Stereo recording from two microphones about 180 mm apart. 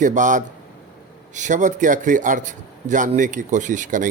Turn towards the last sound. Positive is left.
turn(degrees=-45)  # may be behind; listen again after turning